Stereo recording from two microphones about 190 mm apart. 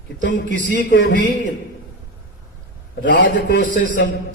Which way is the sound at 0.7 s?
65° left (ahead or behind).